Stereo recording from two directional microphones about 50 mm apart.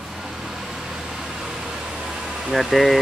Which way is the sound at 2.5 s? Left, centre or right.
Centre.